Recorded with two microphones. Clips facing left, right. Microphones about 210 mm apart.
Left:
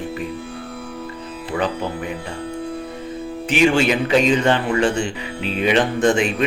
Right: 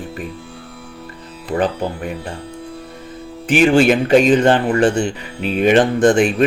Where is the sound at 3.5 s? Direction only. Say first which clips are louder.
Right 4 dB; 50° right (ahead or behind).